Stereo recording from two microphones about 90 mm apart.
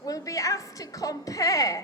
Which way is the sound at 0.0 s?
40° left (ahead or behind).